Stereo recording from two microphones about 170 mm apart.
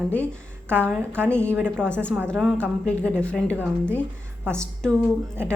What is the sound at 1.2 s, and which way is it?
Speech, 5° left (ahead or behind).